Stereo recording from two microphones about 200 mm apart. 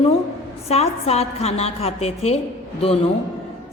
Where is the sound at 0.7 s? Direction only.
30° left (ahead or behind).